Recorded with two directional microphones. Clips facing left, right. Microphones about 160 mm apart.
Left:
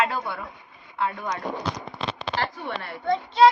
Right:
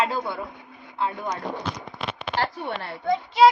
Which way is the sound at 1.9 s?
30° left (ahead or behind).